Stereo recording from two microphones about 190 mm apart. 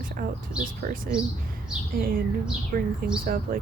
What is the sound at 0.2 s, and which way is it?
Speech, 50° right (ahead or behind).